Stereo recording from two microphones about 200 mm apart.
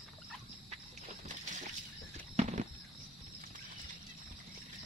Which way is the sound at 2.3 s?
35° right (ahead or behind).